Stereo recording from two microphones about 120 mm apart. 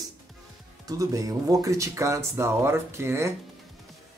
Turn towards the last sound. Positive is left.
turn(degrees=-25)  # may be behind; listen again after turning